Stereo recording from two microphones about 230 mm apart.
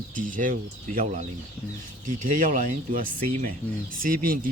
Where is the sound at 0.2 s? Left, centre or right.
Right.